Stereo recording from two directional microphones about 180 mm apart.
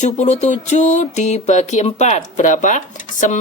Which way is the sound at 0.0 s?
40° left (ahead or behind).